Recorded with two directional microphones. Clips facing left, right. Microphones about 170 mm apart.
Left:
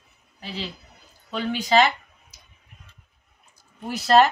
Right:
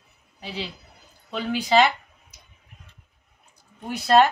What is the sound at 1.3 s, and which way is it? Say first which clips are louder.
Speech: even; 5° right (ahead or behind).